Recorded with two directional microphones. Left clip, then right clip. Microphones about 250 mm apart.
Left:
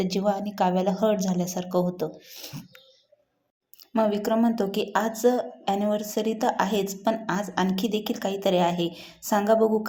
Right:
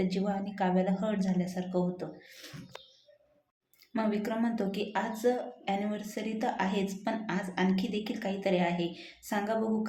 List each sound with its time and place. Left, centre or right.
0.0 s a woman's voice: left
3.9 s a woman's voice: left